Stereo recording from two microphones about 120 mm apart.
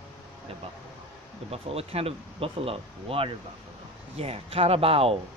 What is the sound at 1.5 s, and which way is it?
Speech, 55° right (ahead or behind).